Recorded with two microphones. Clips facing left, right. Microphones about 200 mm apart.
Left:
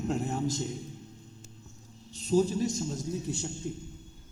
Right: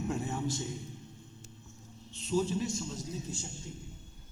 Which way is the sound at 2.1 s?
35° left (ahead or behind).